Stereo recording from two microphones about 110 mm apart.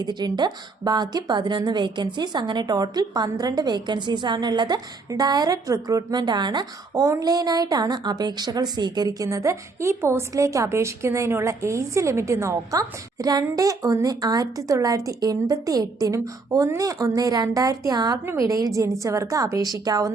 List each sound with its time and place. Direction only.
0.0 s a woman's voice: 40° right (ahead or behind)
7.0 s a woman's voice: 30° right (ahead or behind)